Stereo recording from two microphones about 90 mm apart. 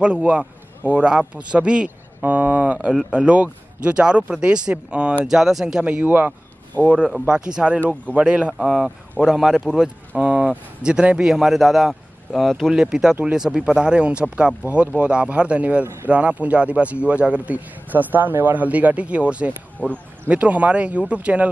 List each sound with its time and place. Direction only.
0.0 s a man's voice: 10° right (ahead or behind)
19.8 s speech: 15° left (ahead or behind)
20.2 s a man's voice: 15° right (ahead or behind)